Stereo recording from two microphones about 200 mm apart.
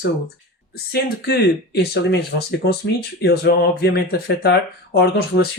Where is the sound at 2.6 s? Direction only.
65° left (ahead or behind).